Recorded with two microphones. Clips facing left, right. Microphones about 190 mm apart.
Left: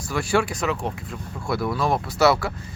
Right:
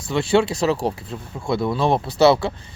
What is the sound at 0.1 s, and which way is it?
Speech, 25° right (ahead or behind).